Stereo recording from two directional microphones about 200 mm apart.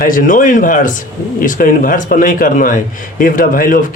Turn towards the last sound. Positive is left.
turn(degrees=40)  # may be behind; listen again after turning